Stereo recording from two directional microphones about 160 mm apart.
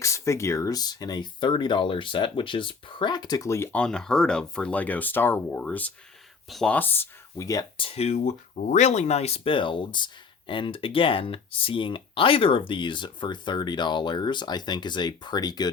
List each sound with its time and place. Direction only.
0.0 s speech: 20° left (ahead or behind)
7.8 s speech: 35° left (ahead or behind)